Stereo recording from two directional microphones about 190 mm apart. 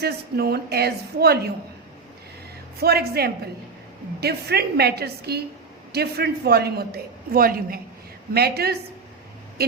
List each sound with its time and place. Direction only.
0.0 s a man's voice: 55° right (ahead or behind)
2.7 s a man's voice: 55° right (ahead or behind)
9.6 s vehicle: 55° right (ahead or behind)